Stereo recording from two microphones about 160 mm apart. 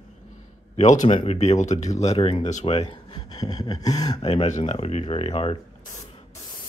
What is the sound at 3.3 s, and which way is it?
Speech, 25° left (ahead or behind).